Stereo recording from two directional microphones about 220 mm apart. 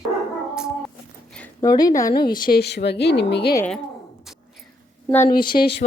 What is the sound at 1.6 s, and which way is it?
Speech, 15° left (ahead or behind).